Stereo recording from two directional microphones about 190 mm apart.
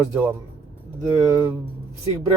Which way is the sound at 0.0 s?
10° right (ahead or behind).